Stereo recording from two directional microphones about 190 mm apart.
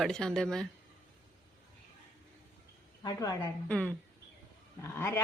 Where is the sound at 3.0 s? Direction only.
20° left (ahead or behind).